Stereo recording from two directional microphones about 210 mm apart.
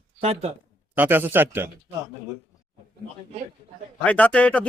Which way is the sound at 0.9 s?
10° right (ahead or behind).